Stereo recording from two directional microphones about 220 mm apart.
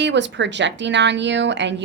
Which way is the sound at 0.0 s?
55° right (ahead or behind).